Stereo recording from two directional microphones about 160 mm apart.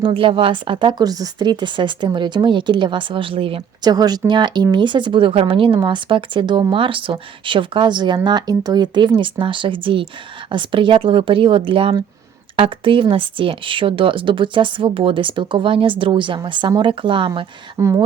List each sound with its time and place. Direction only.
0.0 s a woman's voice: 35° right (ahead or behind)
17.7 s speech: 20° right (ahead or behind)